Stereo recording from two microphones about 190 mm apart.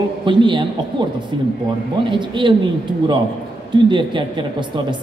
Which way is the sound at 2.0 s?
25° right (ahead or behind).